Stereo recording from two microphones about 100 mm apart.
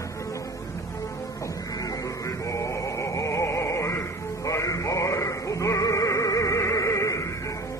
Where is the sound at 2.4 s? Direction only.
30° left (ahead or behind).